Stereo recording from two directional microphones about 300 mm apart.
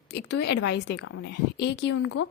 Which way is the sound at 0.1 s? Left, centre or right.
Left.